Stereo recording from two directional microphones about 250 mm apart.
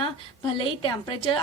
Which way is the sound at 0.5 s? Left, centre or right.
Centre.